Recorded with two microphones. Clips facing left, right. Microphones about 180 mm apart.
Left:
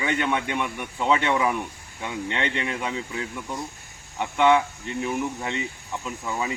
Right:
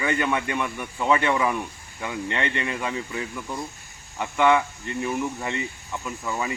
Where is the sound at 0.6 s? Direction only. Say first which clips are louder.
Even; 15° left (ahead or behind).